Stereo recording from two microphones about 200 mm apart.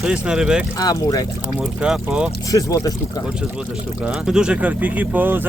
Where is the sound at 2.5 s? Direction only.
20° left (ahead or behind).